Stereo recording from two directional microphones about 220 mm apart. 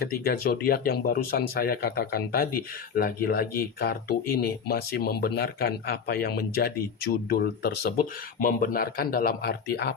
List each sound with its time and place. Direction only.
0.0 s speech: 45° left (ahead or behind)